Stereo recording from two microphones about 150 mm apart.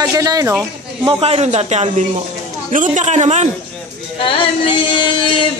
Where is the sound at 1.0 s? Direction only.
35° right (ahead or behind).